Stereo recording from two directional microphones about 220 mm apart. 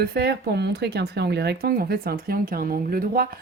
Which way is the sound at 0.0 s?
45° right (ahead or behind).